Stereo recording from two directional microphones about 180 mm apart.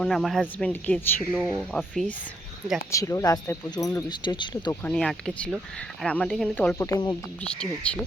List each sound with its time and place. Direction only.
0.0 s speech: centre (ahead or behind)
2.9 s speech: 15° left (ahead or behind)
4.7 s speech: 10° left (ahead or behind)
6.7 s speech: 20° left (ahead or behind)
7.4 s speech: 5° left (ahead or behind)